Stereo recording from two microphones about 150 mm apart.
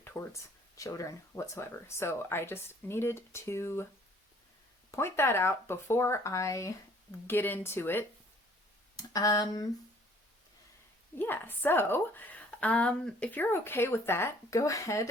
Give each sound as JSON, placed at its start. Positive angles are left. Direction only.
{"t": 0.0, "sound": "speech", "side_deg": 15}
{"t": 4.9, "sound": "speech", "side_deg": 15}
{"t": 11.2, "sound": "speech", "side_deg": 15}